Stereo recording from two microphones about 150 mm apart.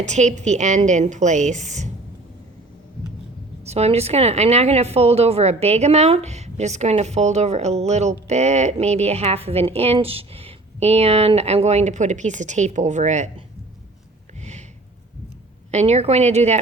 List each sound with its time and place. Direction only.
0.0 s a woman's voice: 50° right (ahead or behind)
3.6 s a woman's voice: 45° right (ahead or behind)
15.7 s a woman's voice: 45° right (ahead or behind)